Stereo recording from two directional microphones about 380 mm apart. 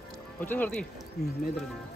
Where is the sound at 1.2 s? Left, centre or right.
Left.